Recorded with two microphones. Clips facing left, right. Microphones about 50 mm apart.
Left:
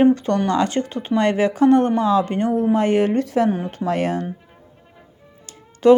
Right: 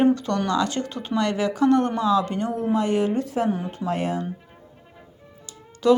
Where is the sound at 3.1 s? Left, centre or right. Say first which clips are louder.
Left 5 dB; left.